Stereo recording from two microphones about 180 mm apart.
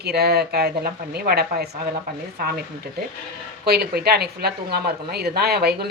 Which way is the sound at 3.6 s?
60° right (ahead or behind).